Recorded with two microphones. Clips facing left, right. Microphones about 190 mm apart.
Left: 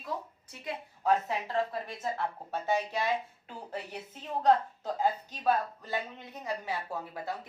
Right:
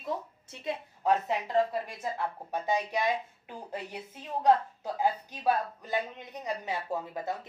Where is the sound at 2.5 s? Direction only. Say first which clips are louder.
Right 1 dB; 15° right (ahead or behind).